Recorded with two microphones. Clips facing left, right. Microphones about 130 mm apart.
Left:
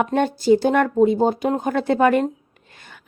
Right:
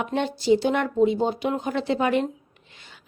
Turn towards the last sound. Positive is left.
turn(degrees=50)  # may be behind; listen again after turning